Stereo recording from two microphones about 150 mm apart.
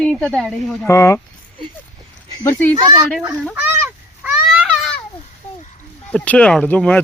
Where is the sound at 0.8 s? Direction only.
20° left (ahead or behind).